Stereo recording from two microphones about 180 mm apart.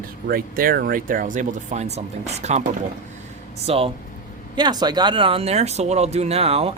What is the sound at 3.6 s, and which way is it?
Speech, 30° right (ahead or behind).